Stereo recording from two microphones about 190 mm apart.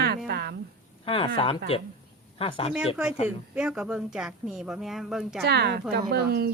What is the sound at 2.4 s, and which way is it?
Speech, 30° left (ahead or behind).